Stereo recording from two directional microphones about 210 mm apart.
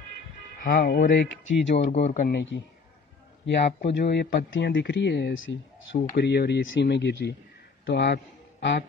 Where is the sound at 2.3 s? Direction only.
60° left (ahead or behind).